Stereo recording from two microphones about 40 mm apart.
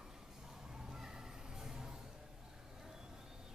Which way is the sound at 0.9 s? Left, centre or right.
Centre.